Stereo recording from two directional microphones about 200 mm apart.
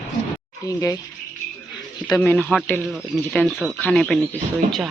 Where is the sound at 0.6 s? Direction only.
15° left (ahead or behind).